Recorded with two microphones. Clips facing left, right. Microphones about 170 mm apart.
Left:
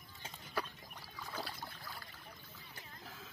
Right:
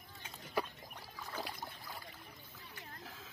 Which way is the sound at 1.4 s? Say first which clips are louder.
Right 2 dB; 15° right (ahead or behind).